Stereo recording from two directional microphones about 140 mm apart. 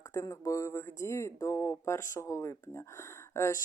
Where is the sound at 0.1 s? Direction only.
20° left (ahead or behind).